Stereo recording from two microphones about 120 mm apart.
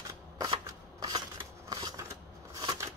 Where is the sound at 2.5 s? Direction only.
30° right (ahead or behind).